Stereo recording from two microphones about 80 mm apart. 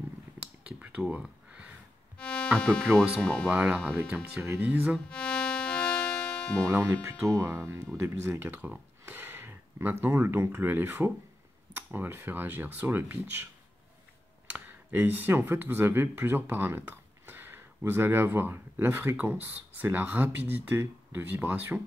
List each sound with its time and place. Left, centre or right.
0.7 s a sound: centre
2.1 s music: centre
2.6 s speech: centre
3.4 s speech: right
5.1 s music: centre
7.0 s speech: right
11.7 s tick-tock: right
12.3 s speech: right
14.5 s speech: right